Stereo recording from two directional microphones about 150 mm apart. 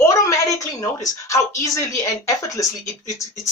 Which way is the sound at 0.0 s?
20° left (ahead or behind).